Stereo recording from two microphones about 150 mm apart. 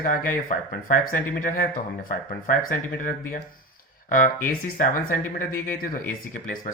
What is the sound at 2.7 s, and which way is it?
Speech, 65° left (ahead or behind).